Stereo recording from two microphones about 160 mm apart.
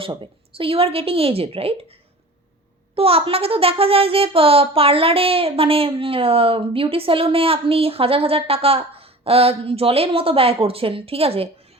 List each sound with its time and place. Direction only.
0.0 s a child's voice: 35° right (ahead or behind)
2.9 s a child's voice: 35° right (ahead or behind)